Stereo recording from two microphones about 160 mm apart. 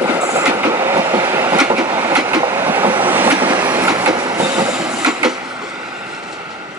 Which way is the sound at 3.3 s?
30° right (ahead or behind).